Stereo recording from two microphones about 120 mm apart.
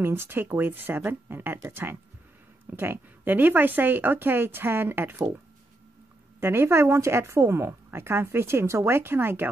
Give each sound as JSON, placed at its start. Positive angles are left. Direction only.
{"t": 0.0, "sound": "speech", "side_deg": -20}
{"t": 6.4, "sound": "speech", "side_deg": -20}